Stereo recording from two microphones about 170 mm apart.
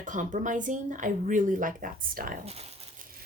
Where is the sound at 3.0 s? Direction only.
55° right (ahead or behind).